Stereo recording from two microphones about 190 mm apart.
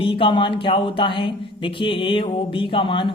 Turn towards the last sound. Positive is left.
turn(degrees=25)  # may be behind; listen again after turning